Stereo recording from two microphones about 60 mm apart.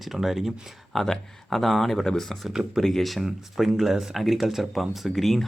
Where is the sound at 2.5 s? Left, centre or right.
Centre.